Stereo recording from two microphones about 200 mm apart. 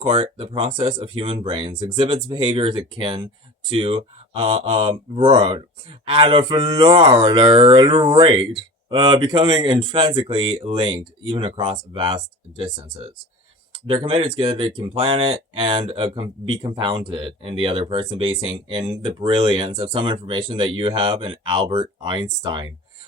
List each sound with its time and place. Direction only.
0.0 s speech: 25° right (ahead or behind)
13.8 s speech: 25° right (ahead or behind)